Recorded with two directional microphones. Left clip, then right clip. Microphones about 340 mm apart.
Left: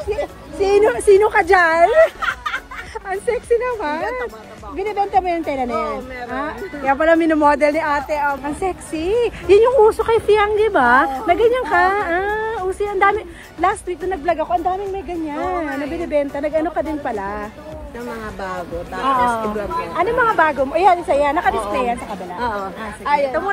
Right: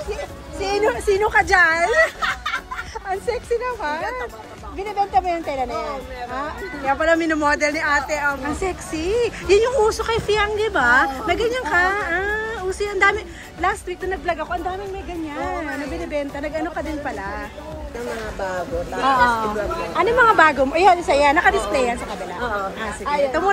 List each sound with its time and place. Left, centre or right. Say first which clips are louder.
0.1 s a woman's voice: left 6 dB; centre
3.1 s a woman's voice: left 5 dB; centre
19.2 s a woman's voice: even; centre
23.0 s speech: left 3 dB; left